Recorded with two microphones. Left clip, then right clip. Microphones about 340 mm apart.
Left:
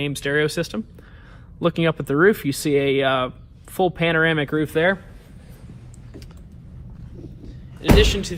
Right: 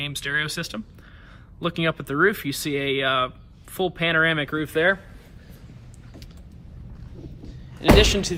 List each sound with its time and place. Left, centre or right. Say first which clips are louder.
0.0 s speech: left 4 dB; centre
7.9 s speech: left 2 dB; centre